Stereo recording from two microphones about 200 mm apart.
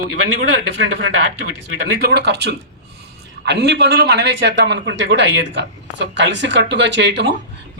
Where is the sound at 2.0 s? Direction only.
55° right (ahead or behind).